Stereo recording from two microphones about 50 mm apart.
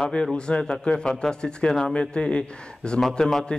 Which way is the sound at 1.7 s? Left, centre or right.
Centre.